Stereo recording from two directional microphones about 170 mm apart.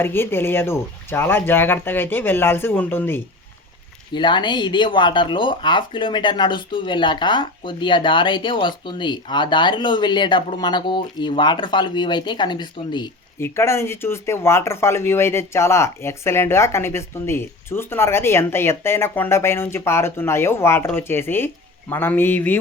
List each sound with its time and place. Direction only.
0.0 s speech: 15° left (ahead or behind)
4.1 s speech: 30° left (ahead or behind)
13.4 s speech: 15° left (ahead or behind)